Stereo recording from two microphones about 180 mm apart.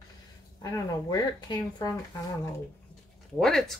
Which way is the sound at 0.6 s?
20° left (ahead or behind).